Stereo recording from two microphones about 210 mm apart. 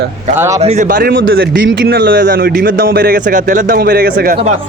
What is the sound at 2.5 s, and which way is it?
Speech, 40° right (ahead or behind).